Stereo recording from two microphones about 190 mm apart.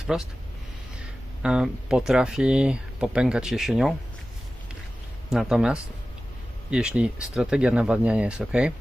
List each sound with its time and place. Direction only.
0.1 s speech: 5° right (ahead or behind)
1.4 s speech: 5° right (ahead or behind)
5.3 s speech: 5° right (ahead or behind)